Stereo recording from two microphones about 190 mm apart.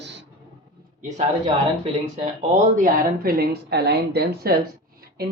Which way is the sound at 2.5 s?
40° right (ahead or behind).